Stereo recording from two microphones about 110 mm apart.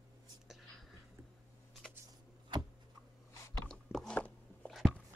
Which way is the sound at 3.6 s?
5° left (ahead or behind).